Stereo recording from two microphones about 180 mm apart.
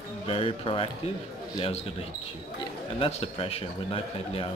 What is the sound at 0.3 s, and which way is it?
Speech, 30° left (ahead or behind).